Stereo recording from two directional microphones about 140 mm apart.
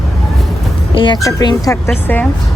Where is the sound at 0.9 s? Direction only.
35° left (ahead or behind); by 2.2 s 15° left (ahead or behind).